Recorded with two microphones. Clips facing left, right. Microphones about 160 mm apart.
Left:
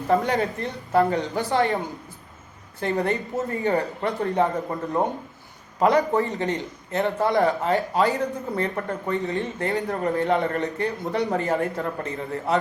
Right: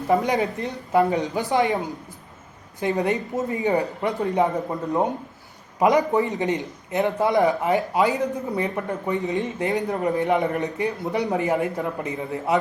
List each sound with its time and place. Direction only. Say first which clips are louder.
0.1 s a man's voice: right 1 dB; 15° right (ahead or behind)